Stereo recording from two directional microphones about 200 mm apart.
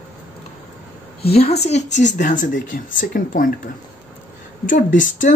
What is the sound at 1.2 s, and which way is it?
Speech, 30° left (ahead or behind).